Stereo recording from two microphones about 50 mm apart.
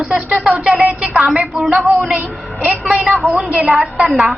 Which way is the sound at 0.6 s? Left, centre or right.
Centre.